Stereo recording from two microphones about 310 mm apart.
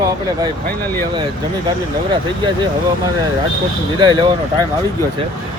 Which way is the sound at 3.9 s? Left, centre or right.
Centre.